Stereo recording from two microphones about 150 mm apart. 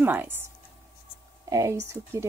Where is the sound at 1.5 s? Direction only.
20° right (ahead or behind).